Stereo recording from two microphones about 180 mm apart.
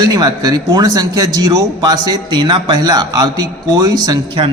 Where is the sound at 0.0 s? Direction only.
20° right (ahead or behind).